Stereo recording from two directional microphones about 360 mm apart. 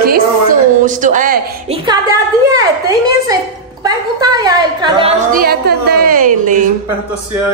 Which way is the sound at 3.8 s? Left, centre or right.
Centre.